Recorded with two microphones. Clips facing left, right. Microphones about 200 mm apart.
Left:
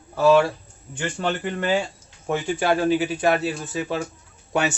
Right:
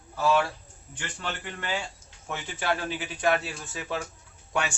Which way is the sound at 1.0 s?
55° left (ahead or behind).